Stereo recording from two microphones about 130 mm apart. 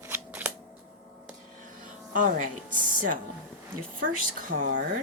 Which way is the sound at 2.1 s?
85° right.